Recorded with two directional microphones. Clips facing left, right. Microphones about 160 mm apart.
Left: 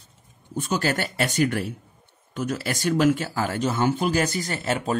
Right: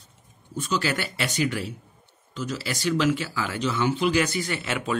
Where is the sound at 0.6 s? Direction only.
50° left (ahead or behind).